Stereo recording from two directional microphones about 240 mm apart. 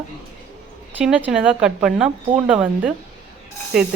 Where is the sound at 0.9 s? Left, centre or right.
Centre.